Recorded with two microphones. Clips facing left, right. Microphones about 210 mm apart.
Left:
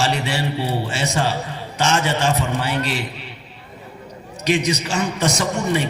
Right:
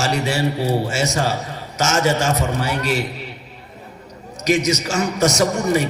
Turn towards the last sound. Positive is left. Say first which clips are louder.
# right 3 dB
turn(degrees=-40)  # may be behind; listen again after turning